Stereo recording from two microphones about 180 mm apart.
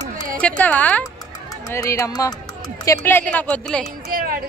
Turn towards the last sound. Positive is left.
turn(degrees=-55)  # may be behind; listen again after turning